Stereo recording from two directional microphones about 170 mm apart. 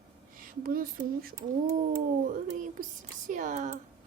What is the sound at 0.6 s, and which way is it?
Speech, 55° right (ahead or behind).